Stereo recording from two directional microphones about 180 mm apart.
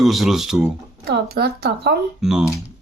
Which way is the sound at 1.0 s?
60° right (ahead or behind).